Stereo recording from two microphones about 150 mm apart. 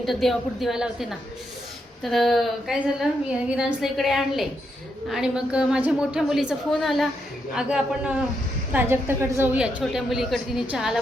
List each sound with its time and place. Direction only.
0.0 s a woman's voice: centre (ahead or behind)
2.0 s a woman's voice: centre (ahead or behind)